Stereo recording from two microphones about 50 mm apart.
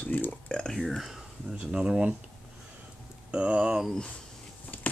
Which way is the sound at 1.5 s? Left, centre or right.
Centre.